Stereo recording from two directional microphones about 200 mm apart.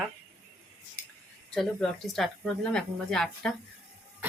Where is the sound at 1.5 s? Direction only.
5° left (ahead or behind).